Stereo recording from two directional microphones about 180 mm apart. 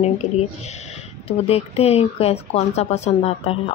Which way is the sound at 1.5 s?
35° left (ahead or behind).